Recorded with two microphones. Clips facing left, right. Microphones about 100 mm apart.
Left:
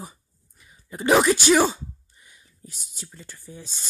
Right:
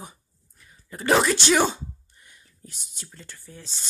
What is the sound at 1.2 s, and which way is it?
Speech, 5° left (ahead or behind).